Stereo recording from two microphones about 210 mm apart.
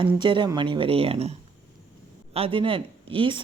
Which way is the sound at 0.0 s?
25° right (ahead or behind).